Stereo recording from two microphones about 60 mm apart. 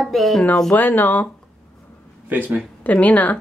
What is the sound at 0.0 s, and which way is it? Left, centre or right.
Speech, centre.